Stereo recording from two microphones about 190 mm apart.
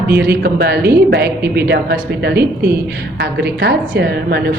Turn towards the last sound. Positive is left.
turn(degrees=-60)  # may be behind; listen again after turning